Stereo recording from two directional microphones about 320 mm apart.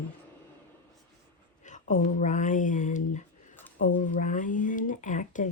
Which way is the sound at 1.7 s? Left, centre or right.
Left.